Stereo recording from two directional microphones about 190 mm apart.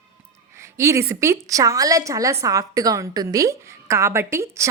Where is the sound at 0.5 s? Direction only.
15° right (ahead or behind).